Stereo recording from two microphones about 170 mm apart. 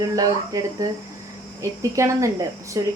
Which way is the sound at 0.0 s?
20° right (ahead or behind).